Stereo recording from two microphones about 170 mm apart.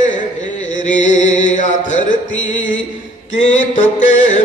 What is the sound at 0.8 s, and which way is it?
Mantra, 45° left (ahead or behind).